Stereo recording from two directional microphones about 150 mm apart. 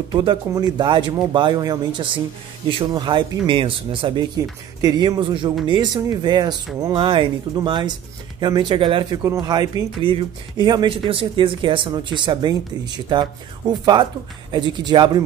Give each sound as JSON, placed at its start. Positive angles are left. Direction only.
{"t": 0.1, "sound": "speech", "side_deg": -30}
{"t": 9.2, "sound": "speech", "side_deg": -25}